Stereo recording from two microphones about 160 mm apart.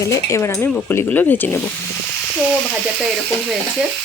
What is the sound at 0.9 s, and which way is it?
Speech, 10° left (ahead or behind).